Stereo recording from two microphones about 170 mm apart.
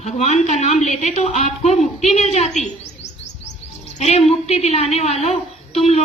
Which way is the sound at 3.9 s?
40° left (ahead or behind).